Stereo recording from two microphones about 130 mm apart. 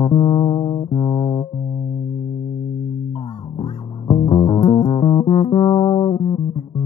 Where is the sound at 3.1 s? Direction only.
35° left (ahead or behind).